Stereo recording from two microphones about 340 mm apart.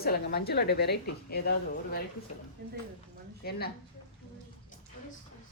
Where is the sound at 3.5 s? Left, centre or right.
Left.